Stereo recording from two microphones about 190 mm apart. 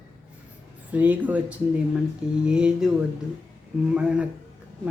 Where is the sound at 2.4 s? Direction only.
5° right (ahead or behind).